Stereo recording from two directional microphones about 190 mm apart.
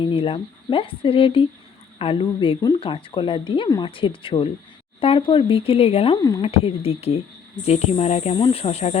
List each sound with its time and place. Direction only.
0.0 s speech: 25° left (ahead or behind)